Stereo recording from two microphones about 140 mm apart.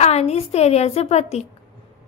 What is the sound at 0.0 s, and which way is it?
A woman's voice, 50° left (ahead or behind).